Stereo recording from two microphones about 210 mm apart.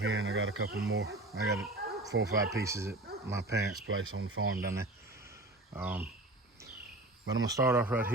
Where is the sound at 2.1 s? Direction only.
55° right (ahead or behind).